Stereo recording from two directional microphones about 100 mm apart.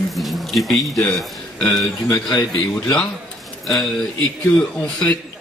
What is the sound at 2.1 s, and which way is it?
Speech, 35° left (ahead or behind).